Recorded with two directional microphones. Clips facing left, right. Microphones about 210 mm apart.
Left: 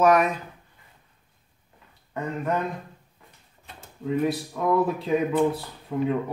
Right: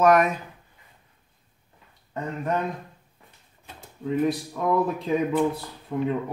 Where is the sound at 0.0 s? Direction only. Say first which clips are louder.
Right 1 dB; centre (ahead or behind).